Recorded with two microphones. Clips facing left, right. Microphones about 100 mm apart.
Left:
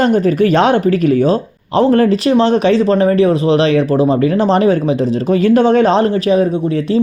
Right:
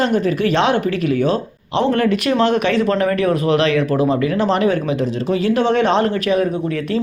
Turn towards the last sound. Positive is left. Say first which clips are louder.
# left 4 dB
turn(degrees=30)  # may be behind; listen again after turning